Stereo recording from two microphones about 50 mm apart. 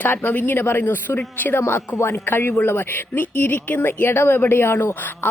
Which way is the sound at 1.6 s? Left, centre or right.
Left.